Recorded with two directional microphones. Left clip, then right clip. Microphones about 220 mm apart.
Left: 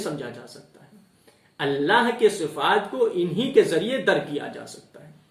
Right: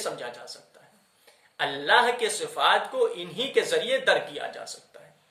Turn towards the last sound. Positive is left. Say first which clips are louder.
# left 1 dB
turn(degrees=-5)  # may be behind; listen again after turning